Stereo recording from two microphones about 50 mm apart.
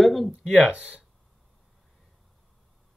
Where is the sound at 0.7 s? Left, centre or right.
Right.